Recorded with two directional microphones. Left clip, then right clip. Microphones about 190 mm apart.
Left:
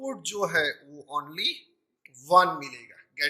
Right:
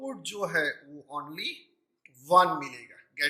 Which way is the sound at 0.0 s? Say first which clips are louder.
Left 4 dB; 20° left (ahead or behind).